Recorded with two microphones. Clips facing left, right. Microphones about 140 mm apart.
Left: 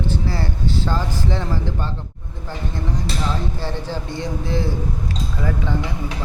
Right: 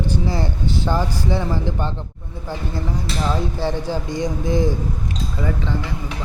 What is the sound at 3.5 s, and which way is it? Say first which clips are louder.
Speech: right 4 dB; 15° right (ahead or behind).